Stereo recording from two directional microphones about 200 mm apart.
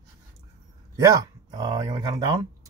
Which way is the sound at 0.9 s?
15° right (ahead or behind).